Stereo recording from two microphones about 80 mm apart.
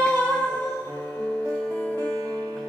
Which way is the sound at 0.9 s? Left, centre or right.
Left.